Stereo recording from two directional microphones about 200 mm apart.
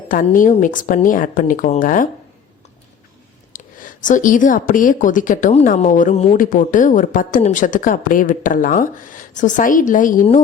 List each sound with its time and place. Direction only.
0.1 s speech: 40° left (ahead or behind)
3.5 s speech: 40° left (ahead or behind)